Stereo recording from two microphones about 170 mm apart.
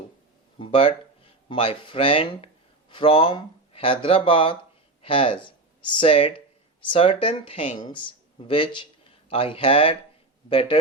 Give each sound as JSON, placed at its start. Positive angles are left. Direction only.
{"t": 0.6, "sound": "speech", "side_deg": 35}